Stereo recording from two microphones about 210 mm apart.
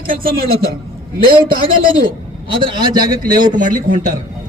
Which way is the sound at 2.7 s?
20° right (ahead or behind).